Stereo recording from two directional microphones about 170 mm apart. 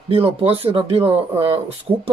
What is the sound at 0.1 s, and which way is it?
Speech, 35° right (ahead or behind).